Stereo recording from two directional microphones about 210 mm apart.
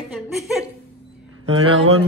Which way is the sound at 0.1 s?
Centre (ahead or behind).